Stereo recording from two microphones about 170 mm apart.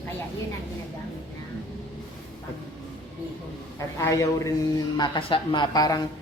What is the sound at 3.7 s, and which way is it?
A man's voice, 15° left (ahead or behind).